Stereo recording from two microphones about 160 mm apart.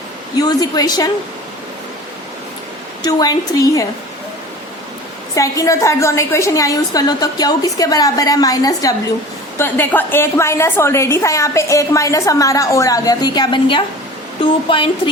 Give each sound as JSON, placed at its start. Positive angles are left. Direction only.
{"t": 0.3, "sound": "a woman's voice", "side_deg": 25}
{"t": 3.0, "sound": "a woman's voice", "side_deg": 25}
{"t": 5.3, "sound": "a woman's voice", "side_deg": 20}